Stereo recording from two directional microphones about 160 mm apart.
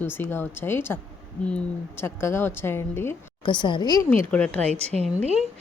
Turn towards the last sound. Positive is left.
turn(degrees=-40)  # may be behind; listen again after turning